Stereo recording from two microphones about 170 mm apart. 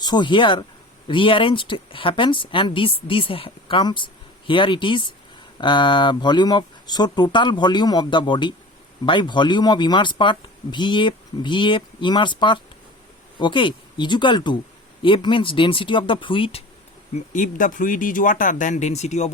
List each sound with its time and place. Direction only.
0.0 s a woman's voice: 25° left (ahead or behind)
17.2 s speech: 50° left (ahead or behind)